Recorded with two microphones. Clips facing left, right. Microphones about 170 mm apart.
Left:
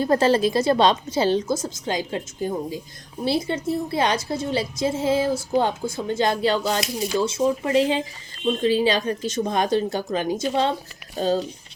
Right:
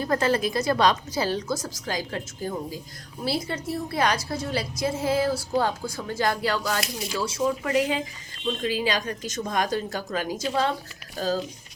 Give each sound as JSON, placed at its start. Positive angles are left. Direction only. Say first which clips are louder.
{"t": 0.0, "sound": "a woman's voice", "louder": "left 5 dB", "side_deg": 30}